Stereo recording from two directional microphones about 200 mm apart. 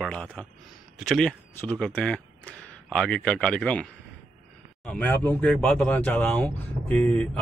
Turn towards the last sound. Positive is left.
turn(degrees=5)  # may be behind; listen again after turning